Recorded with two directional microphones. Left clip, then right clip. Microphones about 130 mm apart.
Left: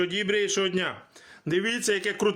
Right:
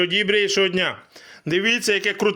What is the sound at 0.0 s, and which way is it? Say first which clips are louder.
A man's voice: right 7 dB; 35° right (ahead or behind).